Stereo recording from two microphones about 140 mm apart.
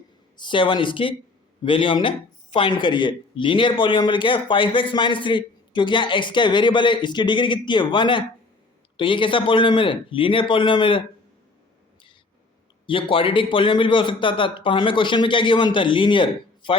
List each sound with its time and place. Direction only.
0.3 s speech: 35° left (ahead or behind)
12.8 s speech: 40° left (ahead or behind)